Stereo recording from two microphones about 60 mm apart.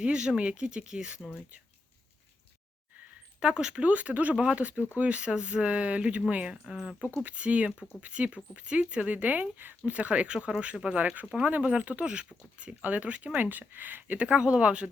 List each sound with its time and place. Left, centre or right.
0.0 s speech: centre
3.4 s speech: centre